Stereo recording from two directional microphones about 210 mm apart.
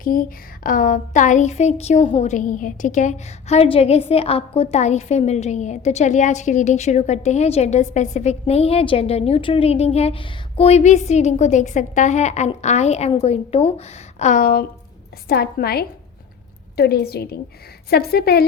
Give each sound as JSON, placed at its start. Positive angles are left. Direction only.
{"t": 0.0, "sound": "a woman's voice", "side_deg": 45}